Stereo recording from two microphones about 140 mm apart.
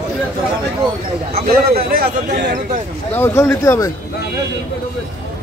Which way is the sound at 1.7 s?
90° right.